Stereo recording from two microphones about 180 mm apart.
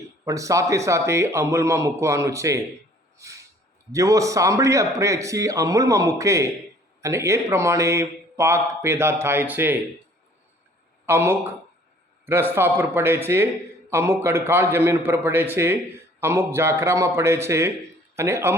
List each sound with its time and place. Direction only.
0.3 s a man's voice: 15° right (ahead or behind)
3.2 s a sound: 15° right (ahead or behind)
3.9 s a man's voice: 20° right (ahead or behind)
11.0 s a man's voice: 10° right (ahead or behind)